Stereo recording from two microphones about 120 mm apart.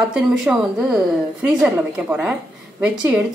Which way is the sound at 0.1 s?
5° right (ahead or behind).